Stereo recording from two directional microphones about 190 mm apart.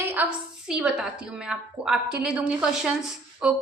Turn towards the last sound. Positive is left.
turn(degrees=-5)  # may be behind; listen again after turning